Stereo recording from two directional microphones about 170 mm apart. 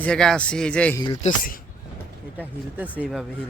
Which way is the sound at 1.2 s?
50° left (ahead or behind).